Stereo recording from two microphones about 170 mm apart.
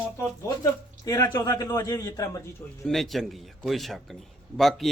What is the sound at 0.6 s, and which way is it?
A man's voice, 20° left (ahead or behind).